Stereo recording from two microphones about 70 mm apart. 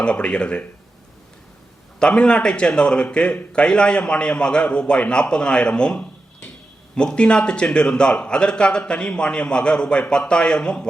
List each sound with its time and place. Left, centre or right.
0.0 s a man's voice: centre
2.0 s a man's voice: centre